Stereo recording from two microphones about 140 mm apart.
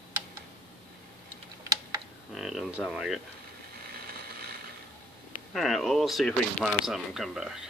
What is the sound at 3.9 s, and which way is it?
Ratchet, 90° right.